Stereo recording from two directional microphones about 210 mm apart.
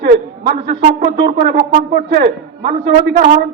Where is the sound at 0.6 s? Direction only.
35° right (ahead or behind).